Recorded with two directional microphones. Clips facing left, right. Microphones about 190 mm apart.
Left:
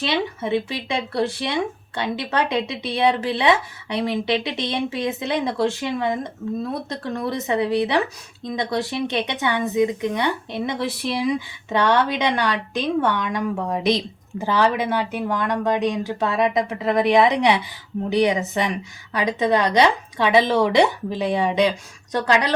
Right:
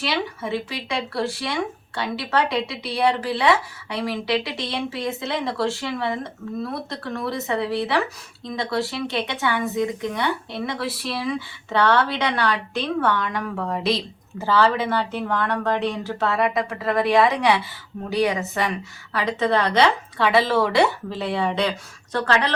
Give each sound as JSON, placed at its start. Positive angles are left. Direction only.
{"t": 0.0, "sound": "speech", "side_deg": 20}